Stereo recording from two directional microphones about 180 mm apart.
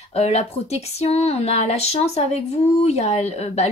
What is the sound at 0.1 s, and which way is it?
A woman's voice, 35° left (ahead or behind).